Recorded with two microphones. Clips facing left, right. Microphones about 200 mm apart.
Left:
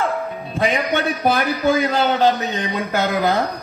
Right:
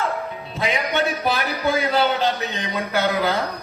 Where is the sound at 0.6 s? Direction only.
50° left (ahead or behind).